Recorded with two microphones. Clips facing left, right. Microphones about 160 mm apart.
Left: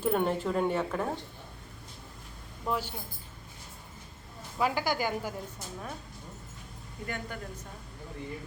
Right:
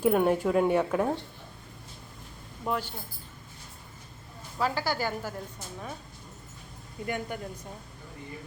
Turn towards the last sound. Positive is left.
turn(degrees=-15)  # may be behind; listen again after turning